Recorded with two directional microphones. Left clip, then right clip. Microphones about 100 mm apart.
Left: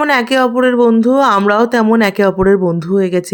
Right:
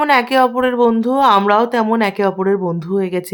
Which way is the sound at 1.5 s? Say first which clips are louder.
Left 2 dB; 50° left (ahead or behind).